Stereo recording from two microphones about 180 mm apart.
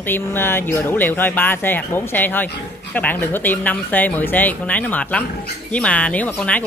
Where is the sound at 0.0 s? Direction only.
10° left (ahead or behind).